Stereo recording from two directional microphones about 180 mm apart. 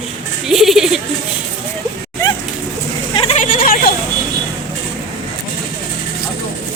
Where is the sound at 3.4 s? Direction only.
50° left (ahead or behind).